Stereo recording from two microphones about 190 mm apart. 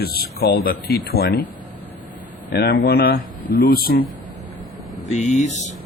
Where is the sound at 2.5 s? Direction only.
55° left (ahead or behind).